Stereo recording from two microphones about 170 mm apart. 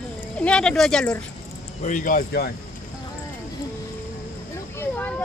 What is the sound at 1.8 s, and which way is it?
Speech, 50° left (ahead or behind).